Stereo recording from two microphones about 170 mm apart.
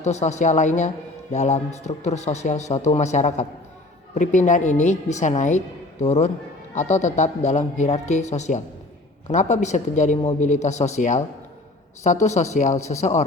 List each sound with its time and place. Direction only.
0.0 s a woman's voice: 40° left (ahead or behind)
12.2 s a man's voice: 40° left (ahead or behind)